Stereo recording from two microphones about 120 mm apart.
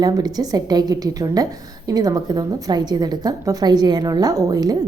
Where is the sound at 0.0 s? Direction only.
35° right (ahead or behind).